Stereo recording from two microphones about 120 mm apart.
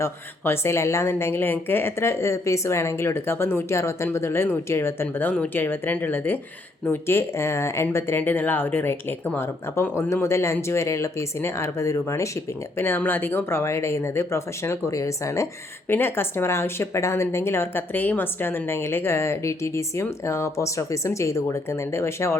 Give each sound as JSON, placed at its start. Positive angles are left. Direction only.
{"t": 0.0, "sound": "a woman's voice", "side_deg": 20}